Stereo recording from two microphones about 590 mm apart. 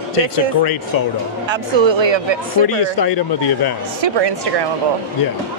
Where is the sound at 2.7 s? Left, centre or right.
Left.